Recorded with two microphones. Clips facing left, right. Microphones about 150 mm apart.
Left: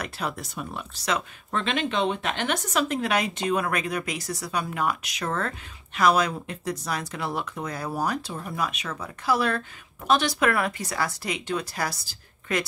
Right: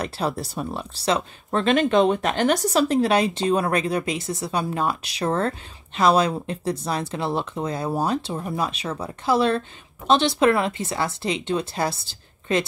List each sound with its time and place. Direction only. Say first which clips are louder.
0.0 s speech: right 6 dB; 30° right (ahead or behind)